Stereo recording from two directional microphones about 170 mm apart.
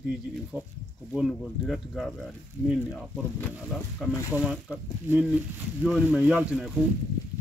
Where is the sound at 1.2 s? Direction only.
Centre (ahead or behind).